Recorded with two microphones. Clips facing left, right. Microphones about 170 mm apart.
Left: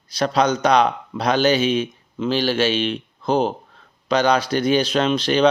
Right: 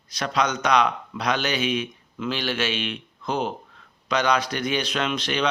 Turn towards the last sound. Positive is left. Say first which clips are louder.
# left 8 dB
turn(degrees=30)  # may be behind; listen again after turning